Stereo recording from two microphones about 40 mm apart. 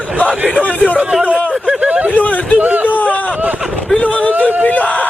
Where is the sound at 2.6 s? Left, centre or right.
Right.